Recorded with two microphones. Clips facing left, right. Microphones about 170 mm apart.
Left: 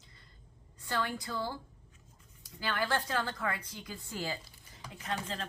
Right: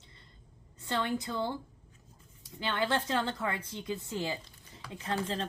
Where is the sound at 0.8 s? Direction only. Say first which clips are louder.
Right 3 dB; 25° right (ahead or behind).